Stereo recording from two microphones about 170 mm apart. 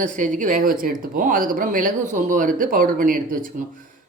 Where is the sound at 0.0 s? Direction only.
50° right (ahead or behind).